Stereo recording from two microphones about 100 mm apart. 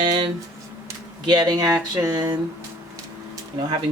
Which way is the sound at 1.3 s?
40° right (ahead or behind).